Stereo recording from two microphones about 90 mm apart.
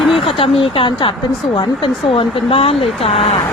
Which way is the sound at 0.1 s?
90° left.